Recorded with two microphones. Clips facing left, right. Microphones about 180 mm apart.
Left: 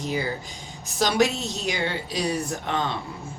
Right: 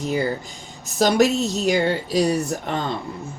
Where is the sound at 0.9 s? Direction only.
45° right (ahead or behind).